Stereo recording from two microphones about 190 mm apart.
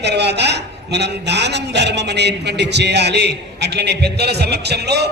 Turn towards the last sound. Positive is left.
turn(degrees=-60)  # may be behind; listen again after turning